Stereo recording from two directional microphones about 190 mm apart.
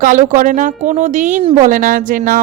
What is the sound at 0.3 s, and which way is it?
A woman's voice, 45° right (ahead or behind).